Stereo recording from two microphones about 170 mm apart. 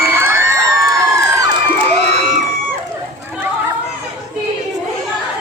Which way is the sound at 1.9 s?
40° right (ahead or behind).